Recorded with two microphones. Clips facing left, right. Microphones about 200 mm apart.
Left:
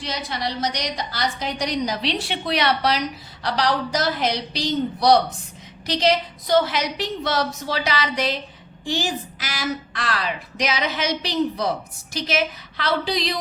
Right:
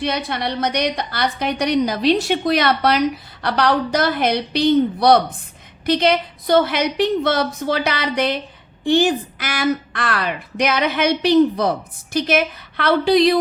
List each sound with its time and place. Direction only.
0.0 s a woman's voice: 60° right (ahead or behind)